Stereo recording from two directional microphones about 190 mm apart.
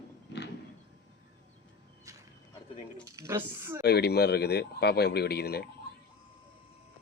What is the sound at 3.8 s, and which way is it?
Speech, 60° left (ahead or behind).